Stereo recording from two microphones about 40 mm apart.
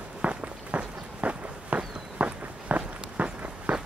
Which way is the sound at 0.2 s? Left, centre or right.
Right.